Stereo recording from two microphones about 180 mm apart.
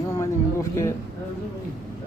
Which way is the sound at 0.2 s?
15° left (ahead or behind).